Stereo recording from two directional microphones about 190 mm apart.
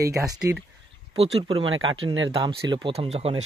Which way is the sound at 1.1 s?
30° right (ahead or behind).